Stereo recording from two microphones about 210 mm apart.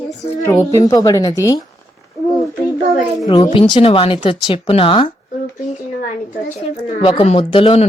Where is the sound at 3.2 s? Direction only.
20° left (ahead or behind).